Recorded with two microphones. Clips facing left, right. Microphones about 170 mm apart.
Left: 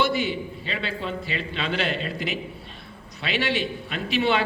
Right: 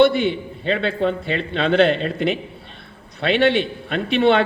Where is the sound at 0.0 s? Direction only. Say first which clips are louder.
Right 9 dB; 55° right (ahead or behind).